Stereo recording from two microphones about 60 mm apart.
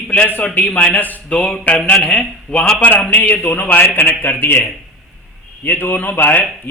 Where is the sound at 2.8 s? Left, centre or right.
Left.